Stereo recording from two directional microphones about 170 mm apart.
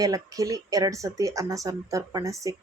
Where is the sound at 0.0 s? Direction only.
20° right (ahead or behind).